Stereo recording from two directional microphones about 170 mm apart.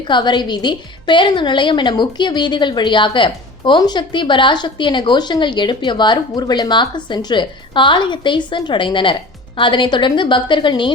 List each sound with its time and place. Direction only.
0.0 s a woman's voice: 25° left (ahead or behind)